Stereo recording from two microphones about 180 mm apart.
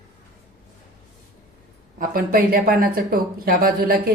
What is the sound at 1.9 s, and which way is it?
Speech, 50° right (ahead or behind).